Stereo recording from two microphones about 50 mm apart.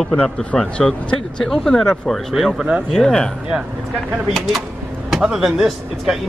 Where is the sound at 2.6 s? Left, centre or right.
Centre.